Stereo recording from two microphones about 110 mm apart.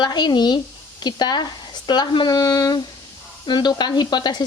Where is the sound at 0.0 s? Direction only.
40° left (ahead or behind).